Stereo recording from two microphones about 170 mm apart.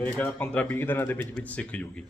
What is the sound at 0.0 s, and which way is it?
A man's voice, 10° left (ahead or behind).